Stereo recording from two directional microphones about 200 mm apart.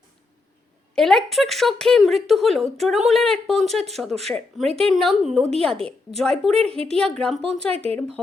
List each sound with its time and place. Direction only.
0.9 s speech: 5° left (ahead or behind)
7.7 s speech: 30° right (ahead or behind)